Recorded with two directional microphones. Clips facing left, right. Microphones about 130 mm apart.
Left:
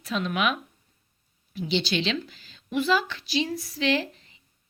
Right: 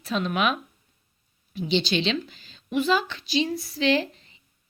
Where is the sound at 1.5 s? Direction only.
25° right (ahead or behind).